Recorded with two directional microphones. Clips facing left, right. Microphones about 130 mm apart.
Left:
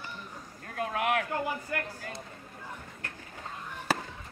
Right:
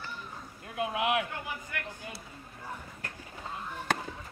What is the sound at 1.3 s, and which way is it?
Speech, 35° left (ahead or behind).